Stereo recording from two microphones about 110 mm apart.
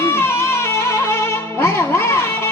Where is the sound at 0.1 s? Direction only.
25° left (ahead or behind).